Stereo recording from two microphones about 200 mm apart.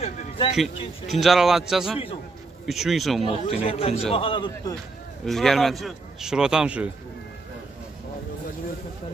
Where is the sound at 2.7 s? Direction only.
Centre (ahead or behind).